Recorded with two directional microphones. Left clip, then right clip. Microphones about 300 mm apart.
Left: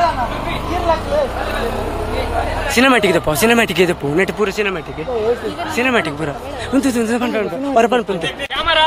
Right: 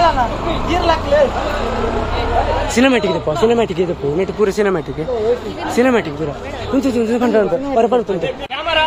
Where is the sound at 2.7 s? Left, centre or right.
Centre.